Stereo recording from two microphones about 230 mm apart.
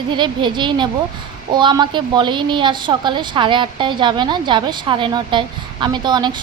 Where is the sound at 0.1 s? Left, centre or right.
Centre.